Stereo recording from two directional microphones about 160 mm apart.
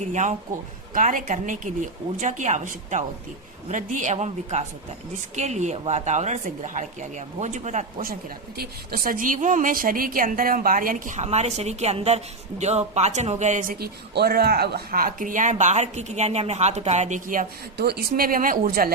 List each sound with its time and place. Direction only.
0.1 s speech: 50° right (ahead or behind)